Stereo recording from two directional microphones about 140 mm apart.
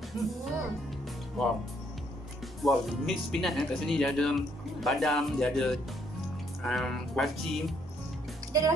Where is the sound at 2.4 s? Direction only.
Centre (ahead or behind).